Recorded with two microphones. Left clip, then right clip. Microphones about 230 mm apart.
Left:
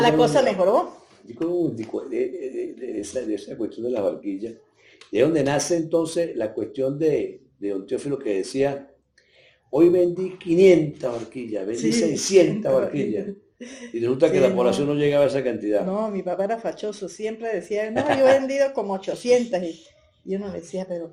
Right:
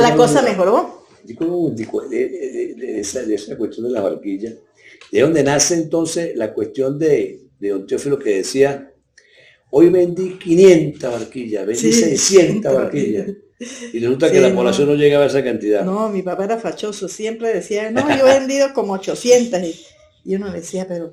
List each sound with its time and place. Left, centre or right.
0.0 s a woman's voice: right
1.5 s speech: left
5.1 s speech: left
9.7 s speech: left
13.6 s speech: right
14.0 s speech: left
16.0 s speech: right